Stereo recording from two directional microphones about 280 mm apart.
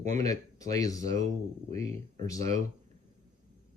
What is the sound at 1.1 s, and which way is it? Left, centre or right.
Speech, right.